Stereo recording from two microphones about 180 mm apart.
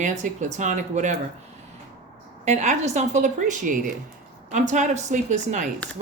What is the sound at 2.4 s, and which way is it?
Speech, 40° right (ahead or behind).